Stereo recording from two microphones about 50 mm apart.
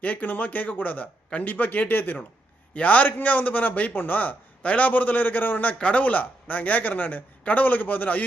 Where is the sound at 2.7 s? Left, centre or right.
Left.